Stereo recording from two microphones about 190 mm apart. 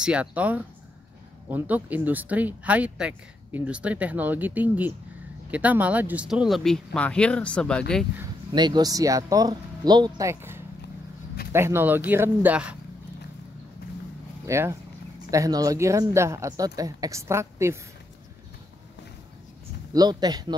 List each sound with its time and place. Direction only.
0.0 s speech: 5° right (ahead or behind)
8.5 s speech: 20° right (ahead or behind)
14.4 s speech: 15° right (ahead or behind)
19.9 s speech: 20° right (ahead or behind)